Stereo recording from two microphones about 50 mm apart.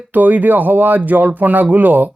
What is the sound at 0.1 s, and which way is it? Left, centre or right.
Speech, right.